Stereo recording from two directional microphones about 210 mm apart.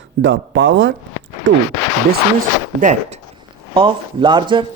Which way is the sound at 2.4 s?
35° right (ahead or behind).